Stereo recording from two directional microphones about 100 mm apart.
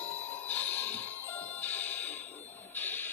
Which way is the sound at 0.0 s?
20° left (ahead or behind).